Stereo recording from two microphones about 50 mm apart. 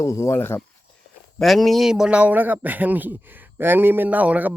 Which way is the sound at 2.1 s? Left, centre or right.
Right.